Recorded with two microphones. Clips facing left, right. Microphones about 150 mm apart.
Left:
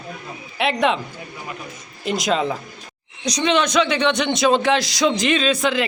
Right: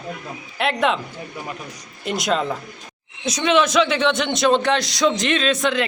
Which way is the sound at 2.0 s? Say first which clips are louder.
Left 1 dB; centre (ahead or behind).